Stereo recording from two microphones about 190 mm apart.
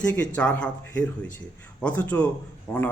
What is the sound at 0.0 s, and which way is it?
A man's voice, 5° left (ahead or behind).